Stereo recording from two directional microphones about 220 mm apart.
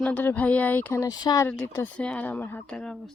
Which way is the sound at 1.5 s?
5° left (ahead or behind).